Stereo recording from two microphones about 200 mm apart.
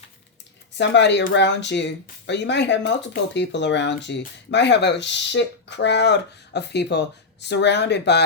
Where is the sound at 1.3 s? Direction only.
60° left (ahead or behind).